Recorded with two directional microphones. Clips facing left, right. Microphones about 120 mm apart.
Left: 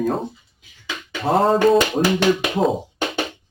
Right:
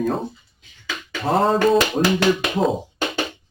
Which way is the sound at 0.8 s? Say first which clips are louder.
Even; 20° left (ahead or behind).